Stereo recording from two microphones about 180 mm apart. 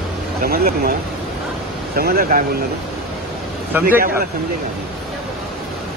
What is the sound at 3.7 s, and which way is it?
Speech, 10° right (ahead or behind).